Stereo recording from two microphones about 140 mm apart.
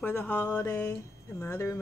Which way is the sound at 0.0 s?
10° left (ahead or behind).